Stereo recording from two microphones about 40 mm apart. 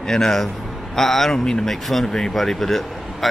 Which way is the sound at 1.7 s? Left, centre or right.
Centre.